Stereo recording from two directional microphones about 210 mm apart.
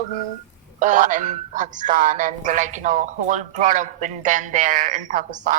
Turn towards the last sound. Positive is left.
turn(degrees=-35)  # may be behind; listen again after turning